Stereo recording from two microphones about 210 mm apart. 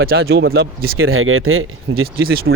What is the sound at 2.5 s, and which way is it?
Speech, 60° right (ahead or behind).